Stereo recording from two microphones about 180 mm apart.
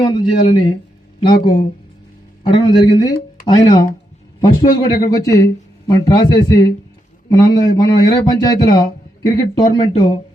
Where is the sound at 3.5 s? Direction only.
20° left (ahead or behind).